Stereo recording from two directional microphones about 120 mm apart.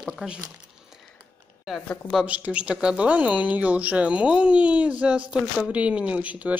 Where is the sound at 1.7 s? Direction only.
Centre (ahead or behind).